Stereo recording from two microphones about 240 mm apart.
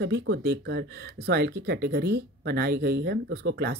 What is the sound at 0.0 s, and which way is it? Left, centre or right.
Speech, right.